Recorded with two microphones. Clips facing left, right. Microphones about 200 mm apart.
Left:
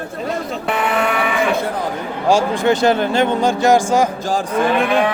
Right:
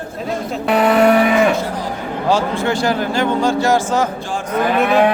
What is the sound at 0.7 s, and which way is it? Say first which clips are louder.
Vehicle: right 8 dB; 40° right (ahead or behind).